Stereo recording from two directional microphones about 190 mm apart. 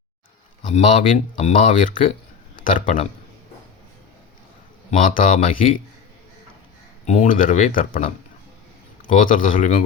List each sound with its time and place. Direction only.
0.7 s speech: 35° left (ahead or behind)
4.9 s speech: 45° left (ahead or behind)
7.0 s speech: 40° left (ahead or behind)
9.1 s speech: 45° left (ahead or behind)